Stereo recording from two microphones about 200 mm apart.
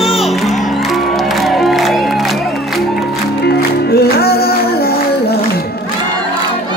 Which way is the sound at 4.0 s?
50° left (ahead or behind).